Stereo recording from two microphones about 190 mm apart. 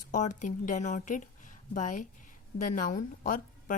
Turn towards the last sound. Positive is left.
turn(degrees=45)  # may be behind; listen again after turning